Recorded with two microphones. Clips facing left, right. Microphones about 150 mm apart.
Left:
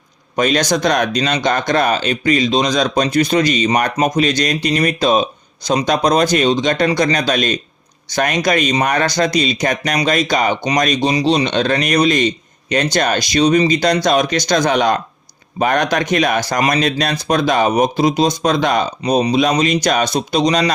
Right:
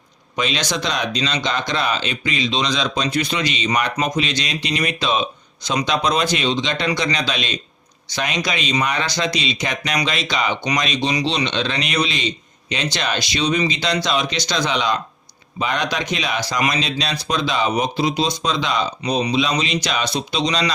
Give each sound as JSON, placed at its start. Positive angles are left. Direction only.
{"t": 0.3, "sound": "speech", "side_deg": 45}